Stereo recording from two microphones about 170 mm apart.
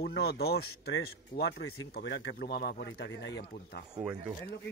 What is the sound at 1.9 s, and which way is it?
Speech, 90° left.